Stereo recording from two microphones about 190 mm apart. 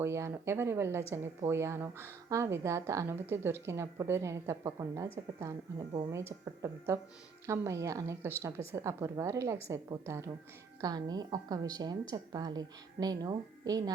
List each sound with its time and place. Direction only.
0.0 s a woman's voice: 15° right (ahead or behind)